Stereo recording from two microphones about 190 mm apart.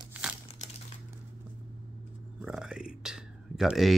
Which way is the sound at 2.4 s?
5° right (ahead or behind).